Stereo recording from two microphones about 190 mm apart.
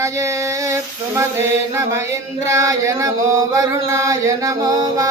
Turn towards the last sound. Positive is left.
turn(degrees=-20)  # may be behind; listen again after turning